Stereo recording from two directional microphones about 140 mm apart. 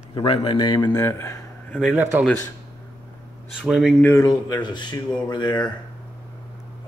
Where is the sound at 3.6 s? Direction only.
5° right (ahead or behind).